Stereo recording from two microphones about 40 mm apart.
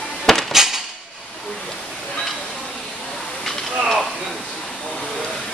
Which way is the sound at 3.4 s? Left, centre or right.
Centre.